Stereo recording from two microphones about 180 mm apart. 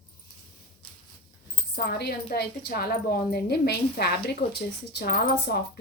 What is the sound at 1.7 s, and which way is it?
Speech, 60° left (ahead or behind).